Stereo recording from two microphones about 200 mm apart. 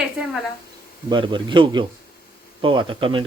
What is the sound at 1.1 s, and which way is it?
Speech, 25° right (ahead or behind).